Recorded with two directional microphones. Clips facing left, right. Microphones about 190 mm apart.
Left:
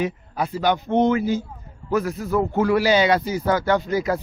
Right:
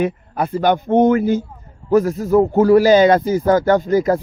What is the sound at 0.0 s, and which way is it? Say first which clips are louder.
A man's voice: right 5 dB; 50° right (ahead or behind).